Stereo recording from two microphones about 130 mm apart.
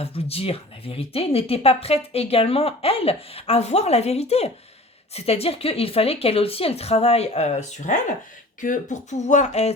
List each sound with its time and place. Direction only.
0.0 s speech: 50° left (ahead or behind); by 7.9 s 65° left (ahead or behind)
8.6 s speech: 80° left; by 9.7 s 60° left (ahead or behind)